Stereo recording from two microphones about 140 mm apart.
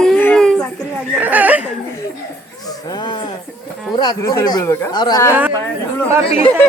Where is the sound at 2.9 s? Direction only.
30° left (ahead or behind).